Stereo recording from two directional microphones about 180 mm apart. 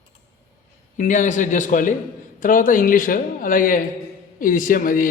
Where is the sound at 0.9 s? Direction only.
45° left (ahead or behind).